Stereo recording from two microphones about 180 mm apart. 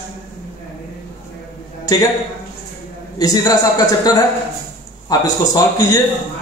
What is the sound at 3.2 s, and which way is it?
A man's voice, 20° left (ahead or behind).